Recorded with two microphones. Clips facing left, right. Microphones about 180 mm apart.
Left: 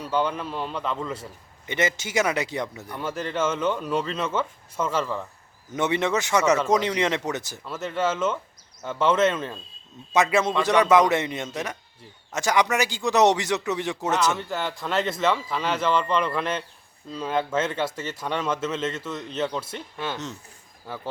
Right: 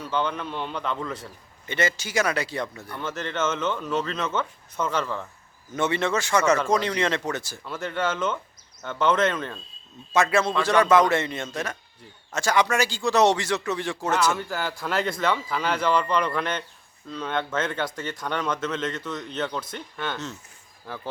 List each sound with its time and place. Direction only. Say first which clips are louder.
0.0 s speech: left 2 dB; 10° left (ahead or behind)
1.2 s speech: left 1 dB; 15° left (ahead or behind)
5.7 s speech: left 1 dB; 20° left (ahead or behind)
7.6 s speech: left 2 dB; centre (ahead or behind)
10.1 s speech: left 1 dB; 15° left (ahead or behind)
14.3 s speech: left 1 dB; centre (ahead or behind)